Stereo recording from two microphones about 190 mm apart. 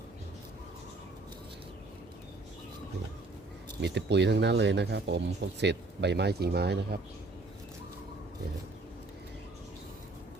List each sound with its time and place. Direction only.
3.8 s speech: 65° right (ahead or behind)